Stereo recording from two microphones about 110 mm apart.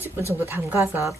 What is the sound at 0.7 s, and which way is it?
Speech, 25° right (ahead or behind).